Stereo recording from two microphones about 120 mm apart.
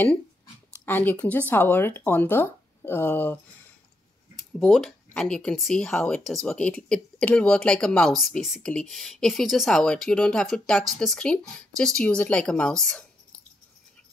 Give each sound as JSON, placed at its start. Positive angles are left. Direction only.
{"t": 0.8, "sound": "speech", "side_deg": 15}
{"t": 4.4, "sound": "speech", "side_deg": 0}